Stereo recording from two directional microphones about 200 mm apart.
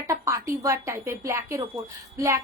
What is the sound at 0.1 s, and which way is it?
A woman's voice, 15° right (ahead or behind).